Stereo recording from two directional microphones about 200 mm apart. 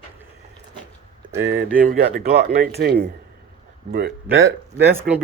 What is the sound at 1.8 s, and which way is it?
Speech, 45° right (ahead or behind).